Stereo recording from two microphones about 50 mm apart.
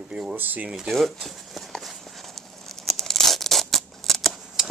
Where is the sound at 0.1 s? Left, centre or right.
Right.